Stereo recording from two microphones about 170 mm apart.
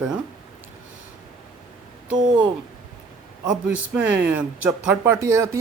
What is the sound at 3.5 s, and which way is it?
Speech, 10° right (ahead or behind).